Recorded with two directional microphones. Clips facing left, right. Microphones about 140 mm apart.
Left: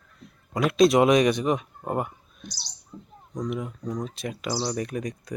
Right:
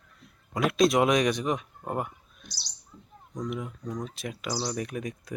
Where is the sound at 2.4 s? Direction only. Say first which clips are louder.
Left 8 dB; 45° left (ahead or behind).